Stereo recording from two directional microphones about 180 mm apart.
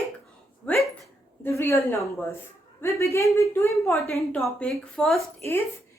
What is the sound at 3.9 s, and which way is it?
A woman's voice, 5° left (ahead or behind).